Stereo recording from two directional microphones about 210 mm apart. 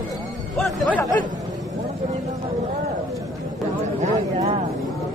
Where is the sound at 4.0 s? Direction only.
35° right (ahead or behind).